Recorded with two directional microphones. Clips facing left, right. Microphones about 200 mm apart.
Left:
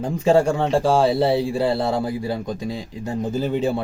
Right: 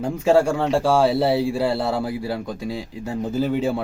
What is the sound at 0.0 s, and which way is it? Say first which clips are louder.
Speech: even; 10° right (ahead or behind).